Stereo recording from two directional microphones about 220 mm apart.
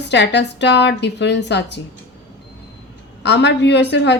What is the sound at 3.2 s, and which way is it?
Speech, 50° left (ahead or behind).